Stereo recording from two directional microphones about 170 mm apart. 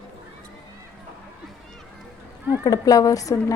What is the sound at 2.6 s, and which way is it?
Speech, 20° left (ahead or behind).